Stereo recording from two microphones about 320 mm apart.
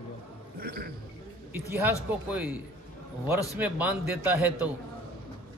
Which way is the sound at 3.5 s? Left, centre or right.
Centre.